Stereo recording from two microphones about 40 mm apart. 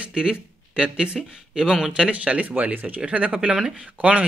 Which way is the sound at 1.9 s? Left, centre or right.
Right.